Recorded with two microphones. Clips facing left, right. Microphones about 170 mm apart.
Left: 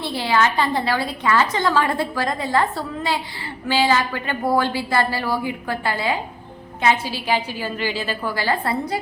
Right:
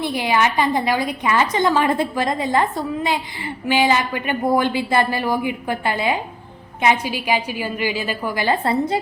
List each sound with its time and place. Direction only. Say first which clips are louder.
0.0 s a woman's voice: right 1 dB; 15° right (ahead or behind)